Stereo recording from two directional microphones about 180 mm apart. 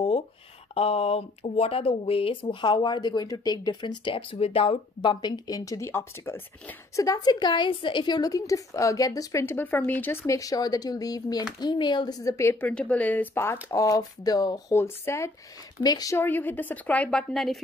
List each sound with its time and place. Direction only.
0.7 s a woman's voice: 35° left (ahead or behind); by 17.6 s centre (ahead or behind)